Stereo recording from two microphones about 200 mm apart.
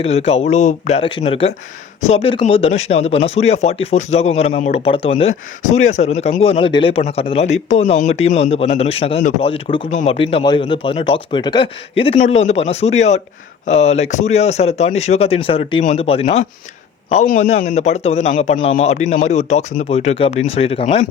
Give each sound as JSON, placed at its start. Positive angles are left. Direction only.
{"t": 0.0, "sound": "speech", "side_deg": 30}
{"t": 10.3, "sound": "speech", "side_deg": 25}
{"t": 12.1, "sound": "speech", "side_deg": 35}